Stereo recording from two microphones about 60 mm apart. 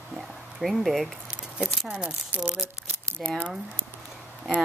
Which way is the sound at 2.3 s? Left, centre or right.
Right.